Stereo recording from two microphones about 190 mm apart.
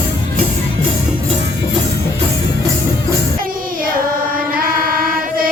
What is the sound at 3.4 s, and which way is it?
Chant, 50° right (ahead or behind).